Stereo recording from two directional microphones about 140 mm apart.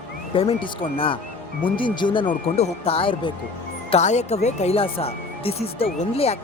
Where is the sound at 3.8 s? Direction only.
55° left (ahead or behind).